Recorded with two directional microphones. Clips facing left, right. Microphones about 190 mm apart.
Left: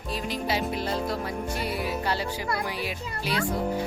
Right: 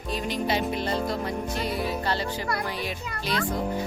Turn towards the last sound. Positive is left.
turn(degrees=10)  # may be behind; listen again after turning